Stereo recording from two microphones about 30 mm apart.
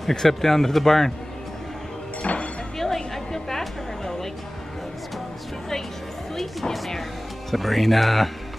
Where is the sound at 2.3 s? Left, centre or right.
Left.